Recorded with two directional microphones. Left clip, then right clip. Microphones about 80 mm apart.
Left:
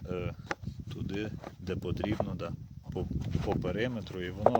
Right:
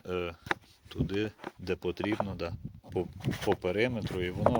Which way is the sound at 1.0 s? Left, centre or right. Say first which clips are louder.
Right 4 dB; left.